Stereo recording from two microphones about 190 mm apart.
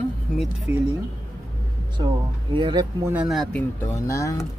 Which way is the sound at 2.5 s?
25° right (ahead or behind).